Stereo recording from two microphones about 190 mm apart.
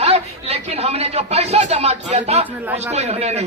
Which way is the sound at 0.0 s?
30° right (ahead or behind).